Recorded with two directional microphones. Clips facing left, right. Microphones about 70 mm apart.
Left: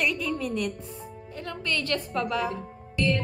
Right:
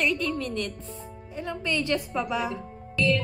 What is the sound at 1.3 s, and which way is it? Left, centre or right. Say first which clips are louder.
A woman's voice: right 2 dB; centre.